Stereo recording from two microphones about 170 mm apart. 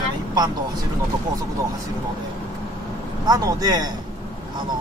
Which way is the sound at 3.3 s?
20° right (ahead or behind).